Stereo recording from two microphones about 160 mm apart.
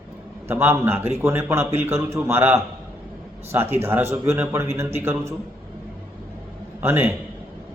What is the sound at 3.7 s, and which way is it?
A man's voice, 15° right (ahead or behind).